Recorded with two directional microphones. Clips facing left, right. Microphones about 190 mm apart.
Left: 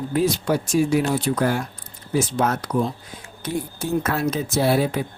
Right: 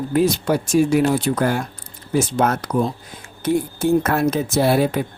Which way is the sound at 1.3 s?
50° right (ahead or behind).